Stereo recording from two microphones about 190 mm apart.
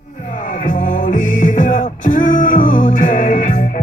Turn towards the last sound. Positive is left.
turn(degrees=45)  # may be behind; listen again after turning